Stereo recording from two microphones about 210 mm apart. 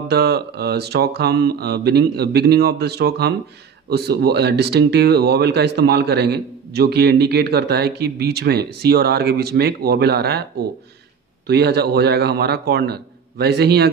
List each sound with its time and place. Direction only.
0.1 s speech: 50° right (ahead or behind)
11.4 s speech: 50° right (ahead or behind)